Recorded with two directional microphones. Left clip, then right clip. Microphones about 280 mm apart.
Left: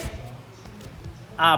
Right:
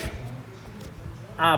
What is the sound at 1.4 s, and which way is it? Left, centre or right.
Speech, centre.